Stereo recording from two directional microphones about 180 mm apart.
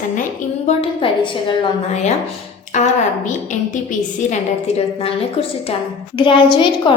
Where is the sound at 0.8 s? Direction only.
30° left (ahead or behind).